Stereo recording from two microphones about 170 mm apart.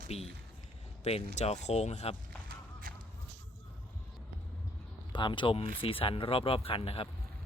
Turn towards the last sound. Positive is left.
turn(degrees=35)  # may be behind; listen again after turning